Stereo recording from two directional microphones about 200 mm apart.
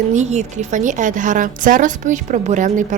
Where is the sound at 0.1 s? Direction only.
35° right (ahead or behind).